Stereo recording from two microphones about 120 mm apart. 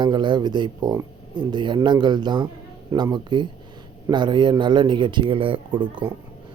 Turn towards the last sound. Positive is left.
turn(degrees=-45)  # may be behind; listen again after turning